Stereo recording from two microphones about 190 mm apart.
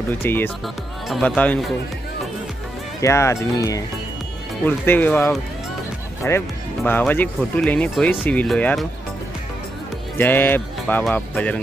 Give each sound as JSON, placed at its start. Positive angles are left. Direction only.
{"t": 0.2, "sound": "speech", "side_deg": 10}
{"t": 3.0, "sound": "speech", "side_deg": 15}
{"t": 10.1, "sound": "speech", "side_deg": 10}